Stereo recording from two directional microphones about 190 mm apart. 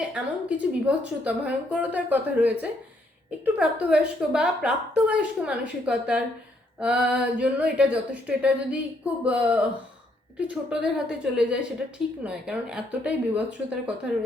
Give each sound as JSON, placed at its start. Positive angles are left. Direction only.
{"t": 0.1, "sound": "a woman's voice", "side_deg": -5}